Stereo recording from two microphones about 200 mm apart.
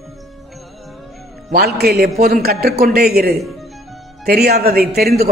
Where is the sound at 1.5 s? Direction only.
50° right (ahead or behind).